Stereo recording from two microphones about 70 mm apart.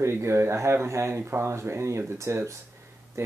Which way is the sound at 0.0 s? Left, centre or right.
Right.